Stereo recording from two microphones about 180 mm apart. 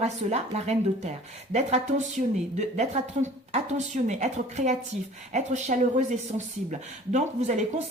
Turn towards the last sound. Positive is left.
turn(degrees=-40)  # may be behind; listen again after turning